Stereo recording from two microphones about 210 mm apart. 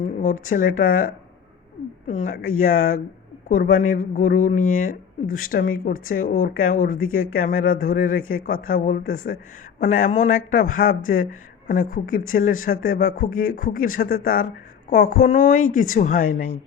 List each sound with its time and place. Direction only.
0.0 s a sound: 40° left (ahead or behind)
0.5 s speech: 40° left (ahead or behind)
13.3 s speech: 75° left (ahead or behind)
13.6 s speech: 40° left (ahead or behind)